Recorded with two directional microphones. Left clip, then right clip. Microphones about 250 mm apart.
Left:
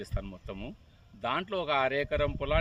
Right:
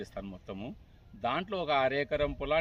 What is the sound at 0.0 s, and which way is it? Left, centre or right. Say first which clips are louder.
Speech: even; centre.